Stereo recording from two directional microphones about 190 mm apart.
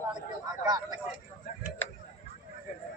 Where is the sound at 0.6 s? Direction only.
20° right (ahead or behind).